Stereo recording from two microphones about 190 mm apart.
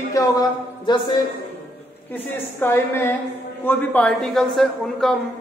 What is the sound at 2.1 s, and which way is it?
A woman's voice, 10° left (ahead or behind).